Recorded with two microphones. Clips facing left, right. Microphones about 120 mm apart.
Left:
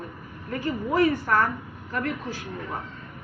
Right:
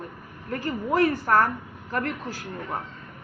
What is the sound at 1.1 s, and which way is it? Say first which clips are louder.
A man's voice: right 1 dB; 40° right (ahead or behind).